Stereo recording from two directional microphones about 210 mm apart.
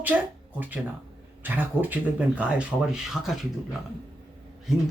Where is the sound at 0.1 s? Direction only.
5° right (ahead or behind).